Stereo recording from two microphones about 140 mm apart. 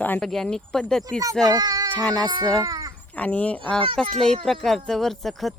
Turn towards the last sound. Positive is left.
turn(degrees=0)  # may be behind; listen again after turning